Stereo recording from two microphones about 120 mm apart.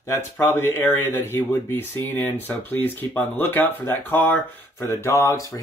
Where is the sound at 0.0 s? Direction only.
20° left (ahead or behind).